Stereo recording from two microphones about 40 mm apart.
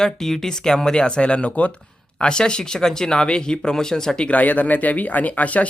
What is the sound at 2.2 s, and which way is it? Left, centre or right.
Speech, left.